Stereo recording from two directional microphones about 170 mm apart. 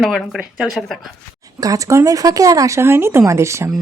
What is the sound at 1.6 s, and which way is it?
A woman's voice, 20° right (ahead or behind).